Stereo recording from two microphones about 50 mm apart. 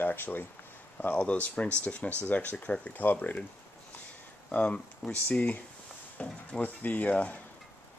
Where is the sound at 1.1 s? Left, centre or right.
Left.